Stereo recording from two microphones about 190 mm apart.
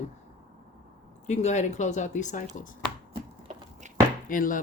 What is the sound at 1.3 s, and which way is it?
Speech, 40° left (ahead or behind).